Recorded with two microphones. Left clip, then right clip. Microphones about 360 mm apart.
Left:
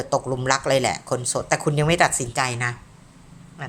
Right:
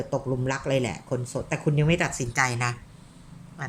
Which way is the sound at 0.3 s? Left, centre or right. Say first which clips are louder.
Left 7 dB; left.